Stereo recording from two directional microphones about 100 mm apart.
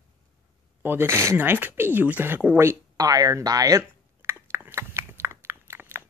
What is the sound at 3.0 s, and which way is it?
Speech, 40° right (ahead or behind).